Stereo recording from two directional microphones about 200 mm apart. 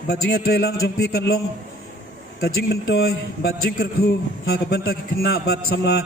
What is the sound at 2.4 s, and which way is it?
A man's voice, 50° left (ahead or behind).